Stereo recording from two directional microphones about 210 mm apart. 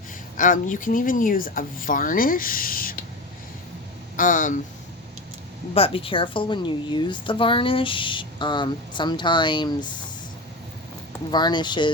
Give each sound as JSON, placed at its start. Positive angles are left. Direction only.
{"t": 0.3, "sound": "speech", "side_deg": 40}
{"t": 4.2, "sound": "speech", "side_deg": 40}
{"t": 5.7, "sound": "a woman's voice", "side_deg": 25}
{"t": 11.3, "sound": "a woman's voice", "side_deg": 20}